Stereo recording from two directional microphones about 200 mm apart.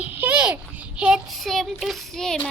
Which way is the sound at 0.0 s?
10° right (ahead or behind).